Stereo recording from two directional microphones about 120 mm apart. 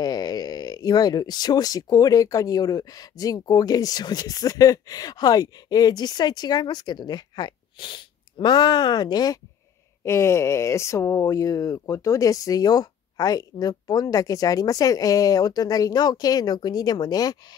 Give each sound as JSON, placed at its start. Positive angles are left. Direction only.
{"t": 0.0, "sound": "speech", "side_deg": 35}
{"t": 10.0, "sound": "speech", "side_deg": 25}